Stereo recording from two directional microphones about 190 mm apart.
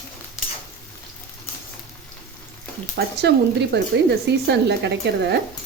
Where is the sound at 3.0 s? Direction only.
60° right (ahead or behind).